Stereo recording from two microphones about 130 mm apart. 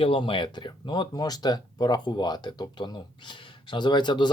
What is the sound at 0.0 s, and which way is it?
Speech, 45° left (ahead or behind).